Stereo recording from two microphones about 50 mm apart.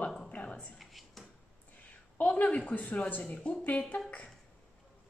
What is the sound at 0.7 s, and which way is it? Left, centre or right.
Drawer open or close, centre.